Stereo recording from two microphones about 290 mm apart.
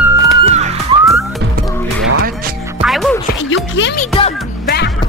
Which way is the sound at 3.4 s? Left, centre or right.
Left.